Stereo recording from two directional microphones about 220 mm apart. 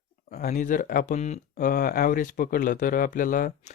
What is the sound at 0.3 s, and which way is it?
Speech, 30° left (ahead or behind).